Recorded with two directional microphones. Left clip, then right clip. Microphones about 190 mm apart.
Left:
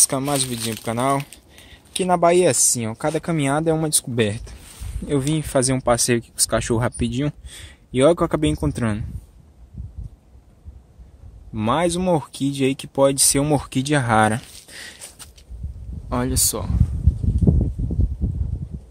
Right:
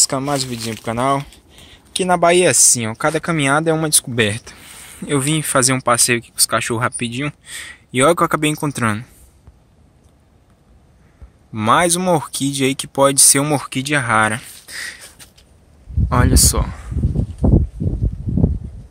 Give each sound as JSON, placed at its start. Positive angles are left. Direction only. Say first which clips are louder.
{"t": 0.0, "sound": "speech", "louder": "right 3 dB", "side_deg": 0}
{"t": 5.9, "sound": "speech", "louder": "right 3 dB", "side_deg": 30}
{"t": 7.4, "sound": "speech", "louder": "right 10 dB", "side_deg": 15}
{"t": 11.5, "sound": "speech", "louder": "right 6 dB", "side_deg": 5}
{"t": 13.6, "sound": "speech", "louder": "right 3 dB", "side_deg": 30}
{"t": 14.7, "sound": "a sound", "louder": "right 10 dB", "side_deg": 20}
{"t": 16.1, "sound": "speech", "louder": "right 6 dB", "side_deg": 0}